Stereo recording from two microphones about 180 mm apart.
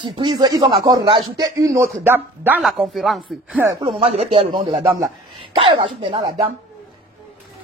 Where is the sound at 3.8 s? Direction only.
35° right (ahead or behind).